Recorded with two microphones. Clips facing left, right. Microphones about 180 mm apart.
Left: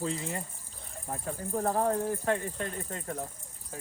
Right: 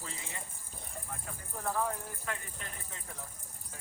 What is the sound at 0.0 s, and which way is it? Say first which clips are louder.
Speech: left 12 dB; 35° left (ahead or behind).